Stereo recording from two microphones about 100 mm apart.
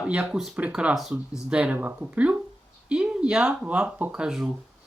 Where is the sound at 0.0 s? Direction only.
10° right (ahead or behind).